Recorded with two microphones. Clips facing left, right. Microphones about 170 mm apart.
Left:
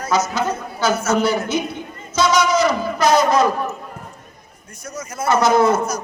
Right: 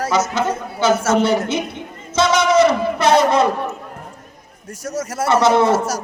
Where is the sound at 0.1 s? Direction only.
25° right (ahead or behind).